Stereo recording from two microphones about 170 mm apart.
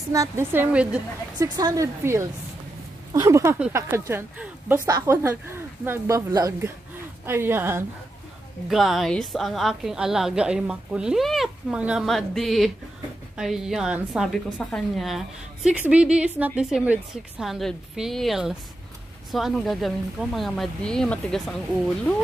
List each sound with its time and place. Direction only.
0.1 s speech: 15° right (ahead or behind)
1.4 s speech: 20° right (ahead or behind)
8.6 s a woman's voice: centre (ahead or behind)